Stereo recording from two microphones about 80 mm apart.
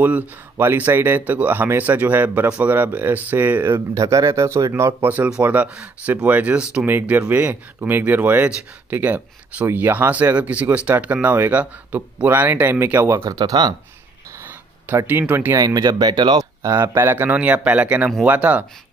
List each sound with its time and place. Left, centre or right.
0.0 s speech: right
3.9 s speech: right
5.0 s speech: right
6.9 s speech: right
13.1 s speech: right
13.4 s speech: right
14.4 s a sound: right
15.5 s speech: right
16.6 s speech: right